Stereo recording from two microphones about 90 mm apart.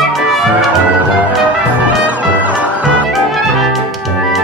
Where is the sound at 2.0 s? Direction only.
15° right (ahead or behind).